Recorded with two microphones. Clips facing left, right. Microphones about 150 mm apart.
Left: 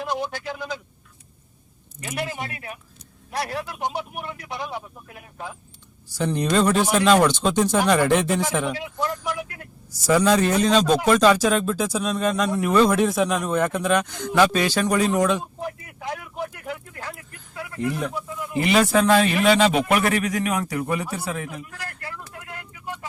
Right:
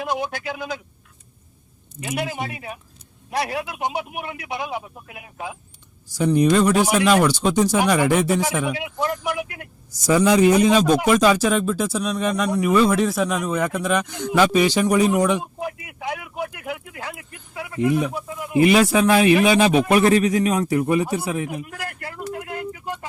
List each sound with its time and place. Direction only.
0.0 s speech: 10° right (ahead or behind)
2.0 s speech: 15° right (ahead or behind)
9.0 s speech: 75° right (ahead or behind)
9.9 s speech: 15° right (ahead or behind)
17.3 s a sound: 15° right (ahead or behind)
18.1 s a man's voice: 20° right (ahead or behind)
18.7 s speech: 5° right (ahead or behind)
19.9 s a man's voice: 25° right (ahead or behind)